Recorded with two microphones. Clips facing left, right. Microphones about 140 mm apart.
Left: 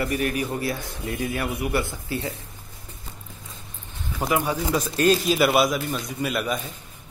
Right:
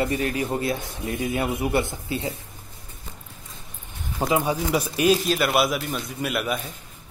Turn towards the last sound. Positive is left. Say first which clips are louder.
# even
turn(degrees=-5)  # may be behind; listen again after turning